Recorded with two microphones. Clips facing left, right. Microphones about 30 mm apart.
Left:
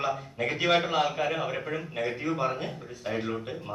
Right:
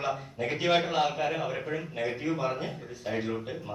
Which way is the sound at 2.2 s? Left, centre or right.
Centre.